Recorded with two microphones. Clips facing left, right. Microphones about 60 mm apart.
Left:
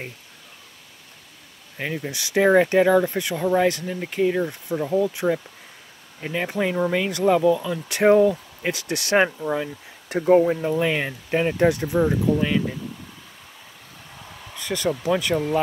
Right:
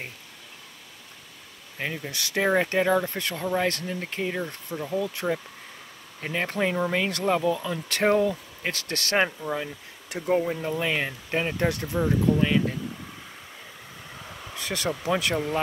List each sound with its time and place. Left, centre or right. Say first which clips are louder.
1.8 s speech: left 3 dB; centre
2.0 s speech: left 7 dB; centre
6.4 s speech: left 3 dB; centre
11.5 s speech: left 7 dB; centre
12.4 s speech: left 1 dB; centre
14.5 s speech: left 5 dB; centre